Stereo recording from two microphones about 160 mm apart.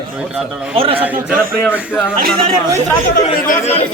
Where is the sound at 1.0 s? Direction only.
10° right (ahead or behind).